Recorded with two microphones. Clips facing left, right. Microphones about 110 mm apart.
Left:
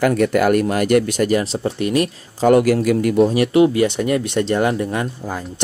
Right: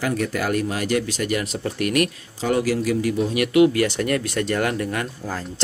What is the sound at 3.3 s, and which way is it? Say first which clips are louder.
Speech: left 2 dB; 30° left (ahead or behind).